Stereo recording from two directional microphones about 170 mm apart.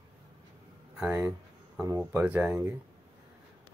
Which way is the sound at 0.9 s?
10° right (ahead or behind).